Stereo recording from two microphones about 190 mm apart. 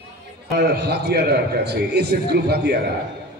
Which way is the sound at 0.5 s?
60° right (ahead or behind).